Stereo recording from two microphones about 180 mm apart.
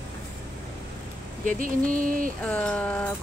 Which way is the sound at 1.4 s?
50° right (ahead or behind).